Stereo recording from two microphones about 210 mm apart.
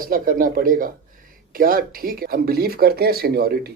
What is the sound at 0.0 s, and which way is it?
Speech, 40° right (ahead or behind).